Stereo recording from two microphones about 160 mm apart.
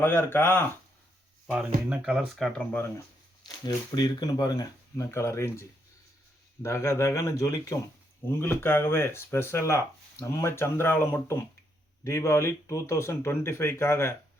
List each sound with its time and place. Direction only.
0.0 s speech: 15° left (ahead or behind)
1.5 s speech: 5° right (ahead or behind); by 2.9 s 10° left (ahead or behind)
3.7 s speech: 25° left (ahead or behind)